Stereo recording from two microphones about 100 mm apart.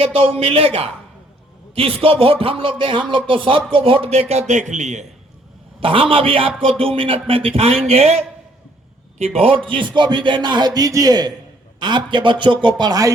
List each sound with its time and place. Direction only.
0.0 s music: 65° right (ahead or behind)
1.7 s speech: 65° right (ahead or behind); by 4.4 s 90° right
5.8 s speech: 60° right (ahead or behind)
6.6 s music: 65° right (ahead or behind); by 8.2 s 90° right
9.1 s speech: 90° right; by 10.7 s 50° right (ahead or behind)
10.8 s a man's voice: 35° right (ahead or behind)